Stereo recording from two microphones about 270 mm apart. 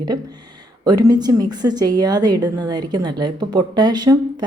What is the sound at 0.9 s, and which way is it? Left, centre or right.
A woman's voice, centre.